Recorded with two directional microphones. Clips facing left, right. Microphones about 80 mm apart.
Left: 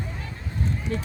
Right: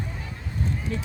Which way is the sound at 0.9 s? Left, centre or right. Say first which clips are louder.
Left 2 dB; left.